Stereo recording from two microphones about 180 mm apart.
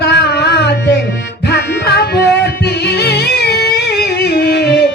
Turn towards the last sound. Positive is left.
turn(degrees=65)  # may be behind; listen again after turning